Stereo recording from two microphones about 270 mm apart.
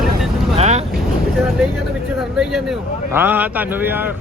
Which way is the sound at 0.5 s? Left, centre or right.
Right.